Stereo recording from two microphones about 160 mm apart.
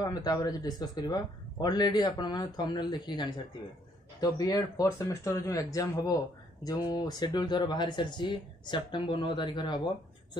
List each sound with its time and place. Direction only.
0.0 s speech: 25° left (ahead or behind)